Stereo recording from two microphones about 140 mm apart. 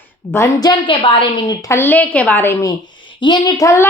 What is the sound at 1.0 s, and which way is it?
Speech, 40° left (ahead or behind).